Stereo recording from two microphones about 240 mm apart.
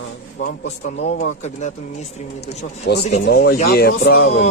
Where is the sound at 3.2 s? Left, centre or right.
Left.